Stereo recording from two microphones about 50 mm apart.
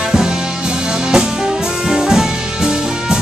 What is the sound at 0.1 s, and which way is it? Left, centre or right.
Music, centre.